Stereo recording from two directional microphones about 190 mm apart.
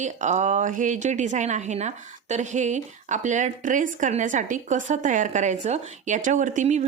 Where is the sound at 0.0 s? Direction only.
40° right (ahead or behind).